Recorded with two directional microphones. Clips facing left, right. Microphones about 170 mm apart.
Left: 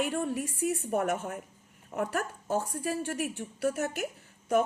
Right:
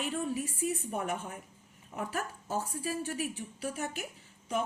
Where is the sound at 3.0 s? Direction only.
65° left (ahead or behind).